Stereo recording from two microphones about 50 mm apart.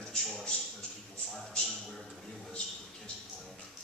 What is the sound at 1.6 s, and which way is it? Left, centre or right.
Speech, centre.